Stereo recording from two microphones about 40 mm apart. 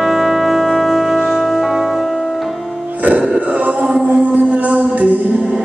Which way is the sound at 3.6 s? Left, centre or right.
Right.